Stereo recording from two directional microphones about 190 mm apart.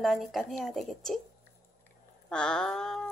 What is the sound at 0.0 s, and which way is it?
A woman's voice, centre (ahead or behind).